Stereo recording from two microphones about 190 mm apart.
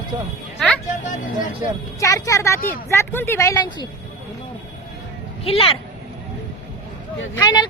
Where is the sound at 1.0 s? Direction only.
40° left (ahead or behind).